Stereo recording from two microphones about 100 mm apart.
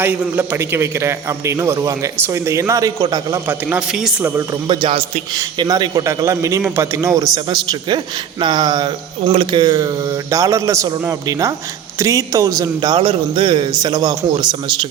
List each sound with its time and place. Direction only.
0.0 s a man's voice: 20° right (ahead or behind); by 3.4 s 35° right (ahead or behind)
3.4 s a man's voice: 20° right (ahead or behind)
3.8 s a man's voice: 5° right (ahead or behind)
4.2 s a man's voice: 20° right (ahead or behind)
4.7 s speech: 55° right (ahead or behind)
5.3 s a man's voice: 40° right (ahead or behind)
7.3 s a man's voice: 45° right (ahead or behind)
9.3 s speech: 60° right (ahead or behind)
9.6 s a man's voice: 40° right (ahead or behind); by 13.7 s 55° right (ahead or behind)
13.7 s a man's voice: 45° right (ahead or behind)